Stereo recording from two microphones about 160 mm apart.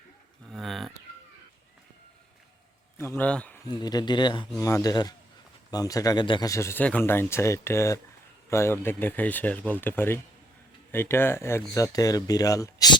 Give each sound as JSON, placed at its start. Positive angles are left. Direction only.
{"t": 0.5, "sound": "cat", "side_deg": 0}
{"t": 3.2, "sound": "speech", "side_deg": 10}
{"t": 3.7, "sound": "speech", "side_deg": 25}